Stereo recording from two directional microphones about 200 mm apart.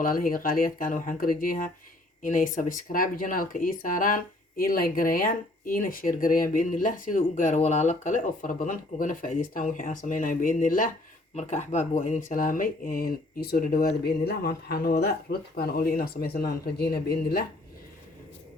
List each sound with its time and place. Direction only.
0.0 s speech: 45° left (ahead or behind)